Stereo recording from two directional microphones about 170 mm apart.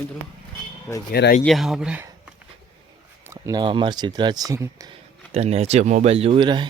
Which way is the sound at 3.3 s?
25° right (ahead or behind).